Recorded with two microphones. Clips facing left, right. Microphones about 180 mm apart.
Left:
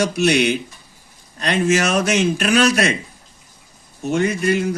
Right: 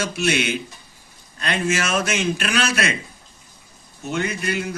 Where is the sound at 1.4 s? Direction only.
40° left (ahead or behind).